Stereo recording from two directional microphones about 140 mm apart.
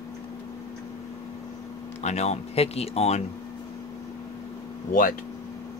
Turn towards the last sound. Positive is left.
turn(degrees=75)  # may be behind; listen again after turning